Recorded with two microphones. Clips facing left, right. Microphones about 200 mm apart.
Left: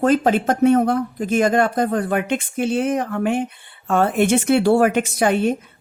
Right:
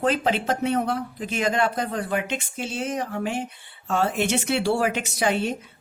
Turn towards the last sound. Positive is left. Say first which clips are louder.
# left 6 dB
turn(degrees=50)  # may be behind; listen again after turning